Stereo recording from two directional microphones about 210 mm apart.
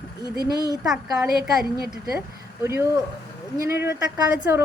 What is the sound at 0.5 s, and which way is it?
Speech, 20° right (ahead or behind).